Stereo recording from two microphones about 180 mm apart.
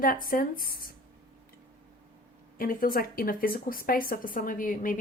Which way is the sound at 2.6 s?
50° left (ahead or behind).